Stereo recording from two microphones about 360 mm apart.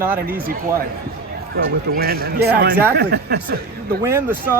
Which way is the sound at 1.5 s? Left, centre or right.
Right.